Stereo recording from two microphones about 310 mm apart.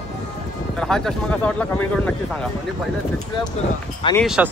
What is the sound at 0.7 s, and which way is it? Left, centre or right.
Speech, centre.